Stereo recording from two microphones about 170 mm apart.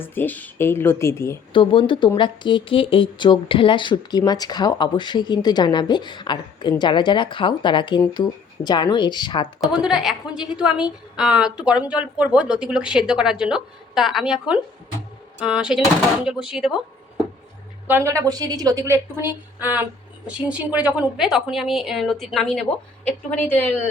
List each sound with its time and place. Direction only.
0.0 s speech: 10° left (ahead or behind)
1.5 s speech: 30° left (ahead or behind)
9.6 s speech: 5° right (ahead or behind)
17.8 s a woman's voice: 15° right (ahead or behind); by 23.7 s 10° left (ahead or behind)